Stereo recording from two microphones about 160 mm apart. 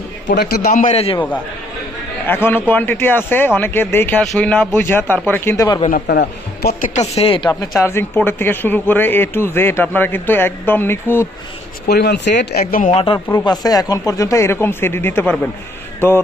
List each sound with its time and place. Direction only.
0.6 s a man's voice: 50° left (ahead or behind)
2.2 s speech: 15° left (ahead or behind)
5.6 s speech: 25° left (ahead or behind)
5.9 s a man's voice: 80° left
6.9 s speech: 40° left (ahead or behind)
7.8 s speech: 15° left (ahead or behind)
11.9 s speech: 90° left; by 12.9 s 65° left (ahead or behind)
12.9 s speech: 40° left (ahead or behind)
13.1 s speech: 15° left (ahead or behind)